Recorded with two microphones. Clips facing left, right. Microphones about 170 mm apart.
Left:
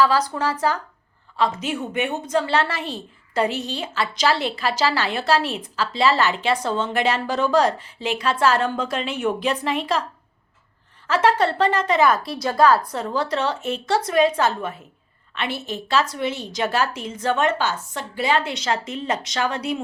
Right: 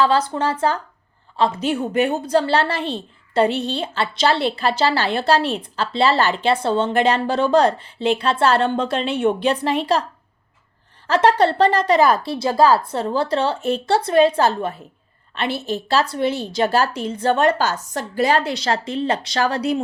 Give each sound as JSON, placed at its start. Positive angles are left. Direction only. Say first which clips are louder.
{"t": 0.0, "sound": "a woman's voice", "louder": "right 2 dB", "side_deg": -25}
{"t": 11.0, "sound": "a woman's voice", "louder": "right 3 dB", "side_deg": -35}